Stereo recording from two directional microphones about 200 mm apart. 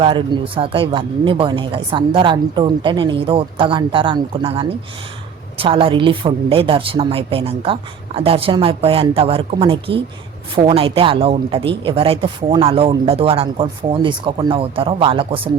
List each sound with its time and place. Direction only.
0.0 s speech: 25° right (ahead or behind)